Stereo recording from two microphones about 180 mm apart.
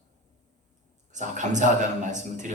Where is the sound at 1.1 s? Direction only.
40° right (ahead or behind).